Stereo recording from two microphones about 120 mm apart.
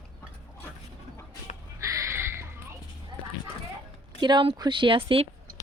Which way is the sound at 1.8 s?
25° right (ahead or behind).